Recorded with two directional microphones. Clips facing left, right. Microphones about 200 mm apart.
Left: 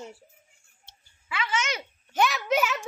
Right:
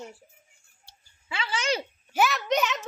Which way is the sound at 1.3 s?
30° right (ahead or behind).